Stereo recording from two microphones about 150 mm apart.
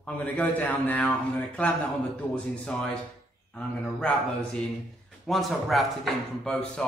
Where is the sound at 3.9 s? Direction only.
5° left (ahead or behind).